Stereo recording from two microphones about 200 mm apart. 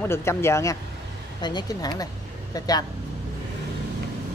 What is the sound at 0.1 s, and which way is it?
Speech, 15° left (ahead or behind).